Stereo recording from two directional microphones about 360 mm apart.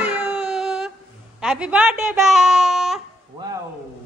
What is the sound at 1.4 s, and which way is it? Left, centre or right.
A woman's voice, centre.